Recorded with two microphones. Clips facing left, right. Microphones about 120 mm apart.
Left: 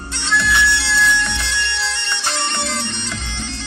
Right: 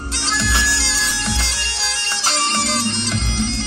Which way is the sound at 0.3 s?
30° right (ahead or behind).